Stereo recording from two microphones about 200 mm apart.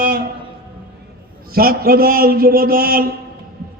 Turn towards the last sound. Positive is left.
turn(degrees=-45)  # may be behind; listen again after turning